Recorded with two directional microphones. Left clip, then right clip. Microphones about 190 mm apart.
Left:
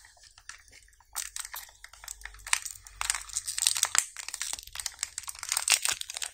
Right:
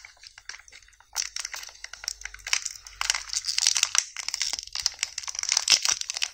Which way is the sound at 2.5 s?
10° right (ahead or behind).